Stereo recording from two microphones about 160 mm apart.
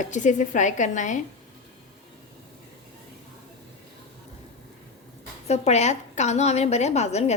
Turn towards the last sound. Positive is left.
turn(degrees=45)  # may be behind; listen again after turning